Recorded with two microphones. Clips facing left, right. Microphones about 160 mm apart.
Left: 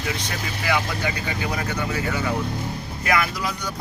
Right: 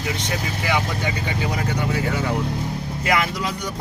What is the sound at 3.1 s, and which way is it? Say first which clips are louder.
Speech: right 1 dB; 25° right (ahead or behind).